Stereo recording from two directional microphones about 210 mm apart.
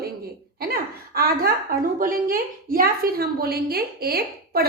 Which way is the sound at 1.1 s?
45° right (ahead or behind).